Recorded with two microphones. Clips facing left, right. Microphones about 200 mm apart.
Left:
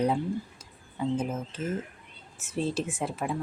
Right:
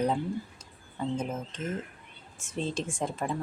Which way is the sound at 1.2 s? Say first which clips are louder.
Left 2 dB; 10° left (ahead or behind).